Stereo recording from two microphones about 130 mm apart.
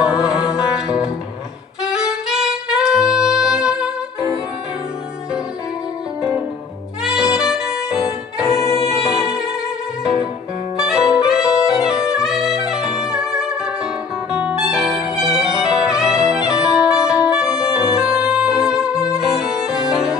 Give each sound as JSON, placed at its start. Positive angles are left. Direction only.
{"t": 0.0, "sound": "music", "side_deg": -5}
{"t": 1.8, "sound": "saxophone", "side_deg": -5}
{"t": 7.0, "sound": "saxophone", "side_deg": -5}
{"t": 8.6, "sound": "music", "side_deg": 20}
{"t": 8.9, "sound": "music", "side_deg": -5}
{"t": 10.8, "sound": "saxophone", "side_deg": -5}
{"t": 14.3, "sound": "music", "side_deg": -5}